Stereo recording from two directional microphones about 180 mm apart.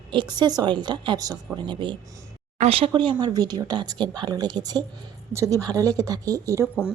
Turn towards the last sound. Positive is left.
turn(degrees=-15)  # may be behind; listen again after turning